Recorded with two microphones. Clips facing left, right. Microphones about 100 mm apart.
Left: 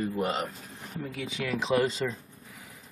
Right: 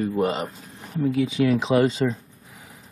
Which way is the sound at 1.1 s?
20° right (ahead or behind).